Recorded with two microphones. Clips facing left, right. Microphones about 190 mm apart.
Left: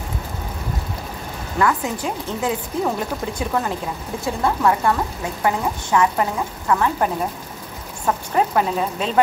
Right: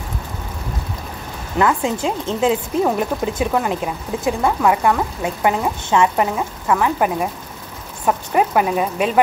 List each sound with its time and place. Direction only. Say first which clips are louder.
1.6 s speech: right 3 dB; 25° right (ahead or behind)
8.4 s speech: right 2 dB; 10° right (ahead or behind)